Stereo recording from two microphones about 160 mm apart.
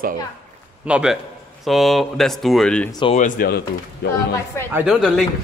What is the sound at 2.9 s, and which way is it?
Speech, 30° left (ahead or behind).